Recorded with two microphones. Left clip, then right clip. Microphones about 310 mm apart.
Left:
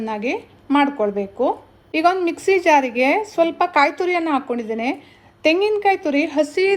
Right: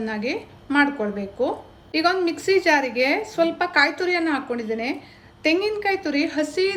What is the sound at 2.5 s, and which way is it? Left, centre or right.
Speech, centre.